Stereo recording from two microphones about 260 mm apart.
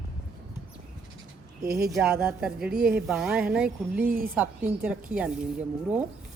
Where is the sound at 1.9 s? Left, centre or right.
Centre.